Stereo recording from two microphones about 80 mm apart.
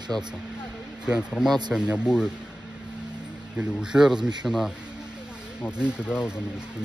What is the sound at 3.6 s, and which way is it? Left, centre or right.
Speech, centre.